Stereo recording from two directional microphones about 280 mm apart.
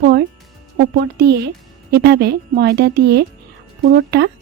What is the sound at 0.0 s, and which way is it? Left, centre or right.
Music, right.